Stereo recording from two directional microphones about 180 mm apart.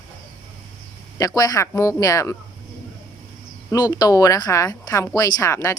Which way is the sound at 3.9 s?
20° left (ahead or behind).